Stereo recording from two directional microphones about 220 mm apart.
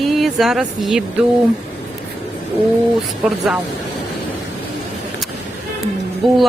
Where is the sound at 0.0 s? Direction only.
Centre (ahead or behind).